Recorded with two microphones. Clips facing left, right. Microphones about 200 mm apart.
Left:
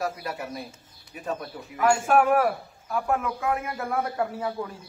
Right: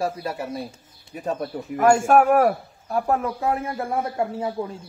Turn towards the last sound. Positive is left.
turn(degrees=-25)  # may be behind; listen again after turning